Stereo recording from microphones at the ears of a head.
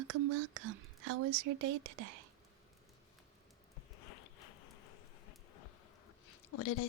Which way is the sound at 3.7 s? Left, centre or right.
Left.